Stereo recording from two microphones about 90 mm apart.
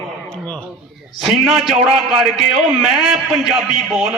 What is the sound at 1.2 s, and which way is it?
A man's voice, 5° right (ahead or behind).